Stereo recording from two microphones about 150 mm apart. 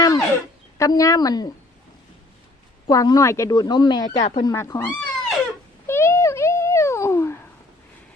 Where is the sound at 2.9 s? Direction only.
25° left (ahead or behind).